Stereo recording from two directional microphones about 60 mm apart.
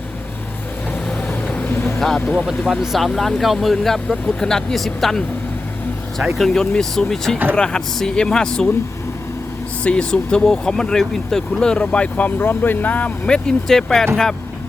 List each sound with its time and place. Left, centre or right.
1.3 s vehicle: centre
2.0 s speech: centre
2.5 s speech: centre
6.3 s speech: centre
6.6 s speech: centre
9.8 s speech: centre
13.2 s speech: centre